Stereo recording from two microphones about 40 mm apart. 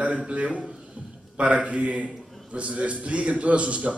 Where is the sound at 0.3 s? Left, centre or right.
Right.